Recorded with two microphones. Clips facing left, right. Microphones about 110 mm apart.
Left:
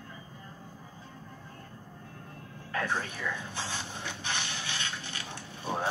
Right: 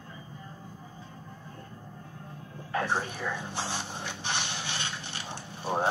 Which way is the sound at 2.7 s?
30° right (ahead or behind).